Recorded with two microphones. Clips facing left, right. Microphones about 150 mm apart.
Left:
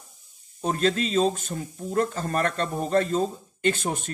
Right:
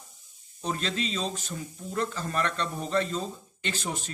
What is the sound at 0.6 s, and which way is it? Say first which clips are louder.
Speech: left 7 dB; 50° left (ahead or behind).